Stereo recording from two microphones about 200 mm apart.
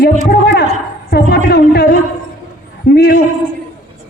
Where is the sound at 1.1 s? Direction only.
55° left (ahead or behind).